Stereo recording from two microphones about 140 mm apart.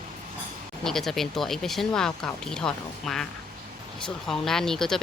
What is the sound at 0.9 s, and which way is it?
Speech, centre (ahead or behind).